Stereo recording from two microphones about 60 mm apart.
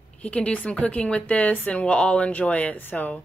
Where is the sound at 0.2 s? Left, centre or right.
Left.